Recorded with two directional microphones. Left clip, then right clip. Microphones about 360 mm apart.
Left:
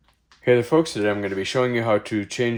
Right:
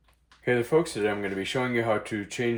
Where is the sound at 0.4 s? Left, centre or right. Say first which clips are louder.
Left 6 dB; left.